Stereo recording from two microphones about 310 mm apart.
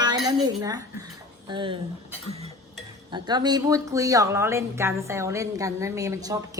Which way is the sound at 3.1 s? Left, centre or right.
Centre.